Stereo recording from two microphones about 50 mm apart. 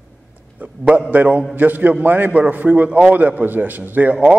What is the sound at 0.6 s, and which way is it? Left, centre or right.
A man's voice, right.